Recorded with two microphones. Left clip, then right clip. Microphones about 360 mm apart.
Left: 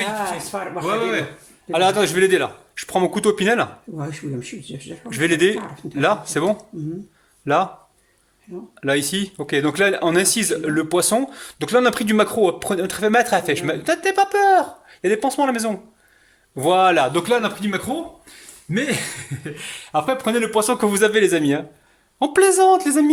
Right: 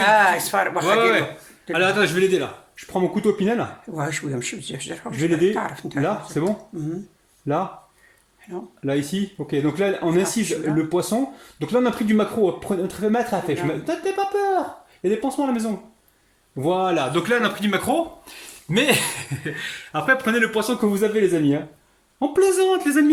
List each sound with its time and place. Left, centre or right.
0.5 s a man's voice: right
0.9 s a man's voice: centre
1.7 s speech: centre; by 3.7 s left
3.9 s a man's voice: right
5.2 s speech: left
8.8 s speech: left; by 19.6 s centre
19.9 s speech: centre